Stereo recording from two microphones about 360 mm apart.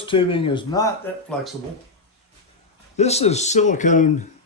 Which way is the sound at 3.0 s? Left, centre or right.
Centre.